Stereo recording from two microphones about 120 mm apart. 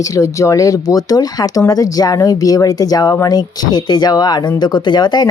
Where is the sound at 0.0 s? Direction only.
25° left (ahead or behind).